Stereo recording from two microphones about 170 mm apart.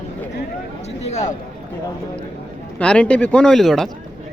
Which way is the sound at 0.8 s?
40° left (ahead or behind).